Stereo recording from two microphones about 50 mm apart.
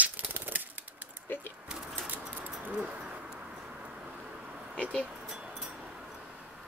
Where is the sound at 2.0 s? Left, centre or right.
Right.